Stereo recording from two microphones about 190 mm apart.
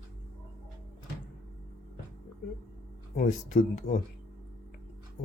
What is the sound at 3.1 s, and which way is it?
Speech, 40° left (ahead or behind).